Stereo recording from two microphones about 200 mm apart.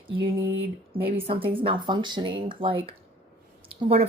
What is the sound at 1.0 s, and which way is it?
Speech, 25° right (ahead or behind).